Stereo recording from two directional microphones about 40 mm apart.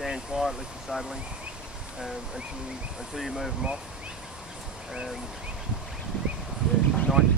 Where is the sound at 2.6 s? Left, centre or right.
Centre.